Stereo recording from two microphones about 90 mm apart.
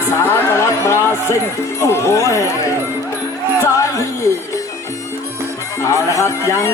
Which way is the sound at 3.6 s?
35° left (ahead or behind).